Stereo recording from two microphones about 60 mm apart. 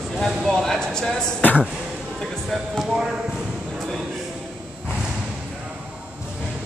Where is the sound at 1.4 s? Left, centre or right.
Left.